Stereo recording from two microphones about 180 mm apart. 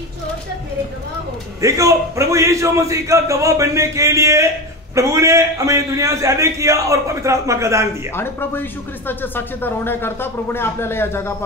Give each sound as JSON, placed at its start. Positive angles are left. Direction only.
{"t": 1.6, "sound": "a man's voice", "side_deg": -15}
{"t": 8.2, "sound": "speech", "side_deg": 10}